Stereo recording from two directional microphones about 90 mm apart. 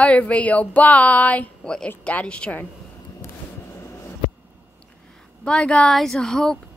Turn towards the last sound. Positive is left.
turn(degrees=5)  # may be behind; listen again after turning